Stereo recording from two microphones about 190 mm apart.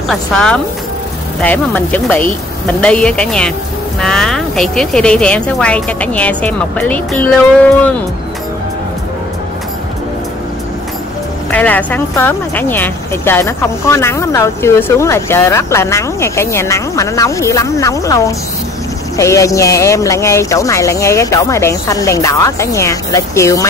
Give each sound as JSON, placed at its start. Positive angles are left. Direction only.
{"t": 0.1, "sound": "speech", "side_deg": 0}
{"t": 11.5, "sound": "speech", "side_deg": 10}